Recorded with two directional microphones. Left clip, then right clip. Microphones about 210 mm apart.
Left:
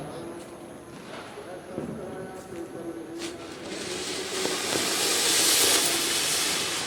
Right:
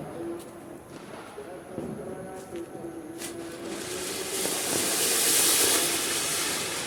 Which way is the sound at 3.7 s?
10° right (ahead or behind).